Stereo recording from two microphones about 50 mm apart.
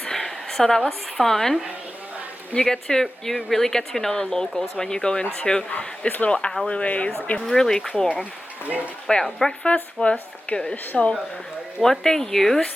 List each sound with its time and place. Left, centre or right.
0.0 s a sound: centre
0.9 s speech: centre
2.6 s speech: centre
5.7 s a woman's voice: left
7.4 s speech: centre
9.2 s speech: centre
9.6 s a woman's voice: left
11.8 s speech: centre